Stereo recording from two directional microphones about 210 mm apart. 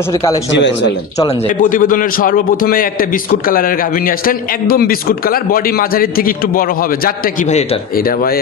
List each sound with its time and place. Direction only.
0.1 s speech: 15° left (ahead or behind)
0.5 s speech: 60° left (ahead or behind)
1.6 s a man's voice: 40° left (ahead or behind)